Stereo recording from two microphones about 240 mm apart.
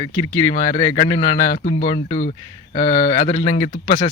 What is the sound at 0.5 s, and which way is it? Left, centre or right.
Speech, left.